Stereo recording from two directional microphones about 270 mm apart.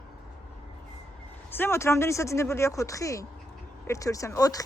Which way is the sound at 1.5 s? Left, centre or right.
Centre.